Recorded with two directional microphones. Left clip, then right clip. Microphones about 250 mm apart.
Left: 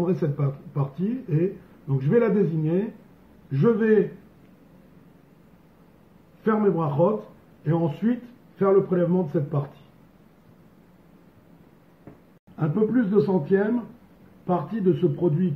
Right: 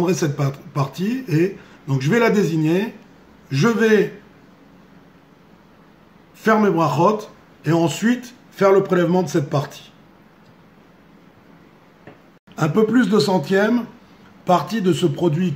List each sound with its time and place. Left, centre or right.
0.0 s speech: right
1.9 s speech: right
6.4 s speech: right
12.5 s speech: right